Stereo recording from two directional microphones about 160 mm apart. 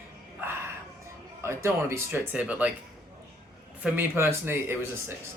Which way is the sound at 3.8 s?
15° right (ahead or behind).